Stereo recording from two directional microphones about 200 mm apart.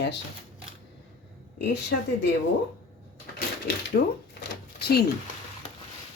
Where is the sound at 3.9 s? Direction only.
45° left (ahead or behind).